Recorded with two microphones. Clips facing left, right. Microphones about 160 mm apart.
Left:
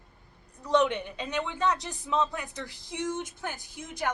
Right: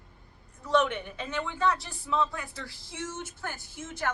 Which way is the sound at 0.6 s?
15° left (ahead or behind).